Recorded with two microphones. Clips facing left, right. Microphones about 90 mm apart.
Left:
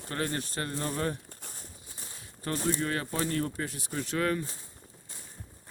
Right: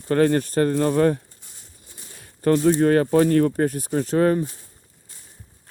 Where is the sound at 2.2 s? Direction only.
55° right (ahead or behind).